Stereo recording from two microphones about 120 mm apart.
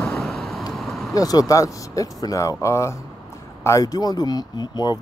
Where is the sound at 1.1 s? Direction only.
30° left (ahead or behind).